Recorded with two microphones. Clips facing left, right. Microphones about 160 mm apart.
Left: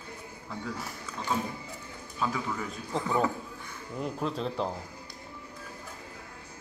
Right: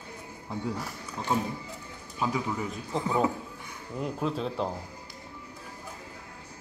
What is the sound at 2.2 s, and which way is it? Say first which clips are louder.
Speech: right 2 dB; 15° right (ahead or behind).